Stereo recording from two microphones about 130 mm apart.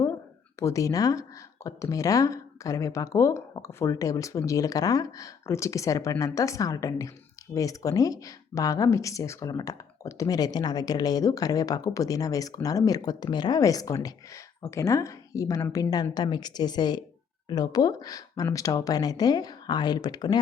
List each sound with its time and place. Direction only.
0.6 s speech: 25° left (ahead or behind)